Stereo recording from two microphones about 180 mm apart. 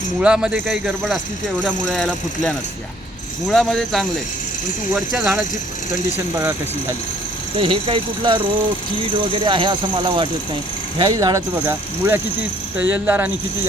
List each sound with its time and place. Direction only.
0.2 s speech: 5° right (ahead or behind)
5.1 s speech: 5° right (ahead or behind)
7.6 s speech: 30° right (ahead or behind); by 13.3 s 10° right (ahead or behind)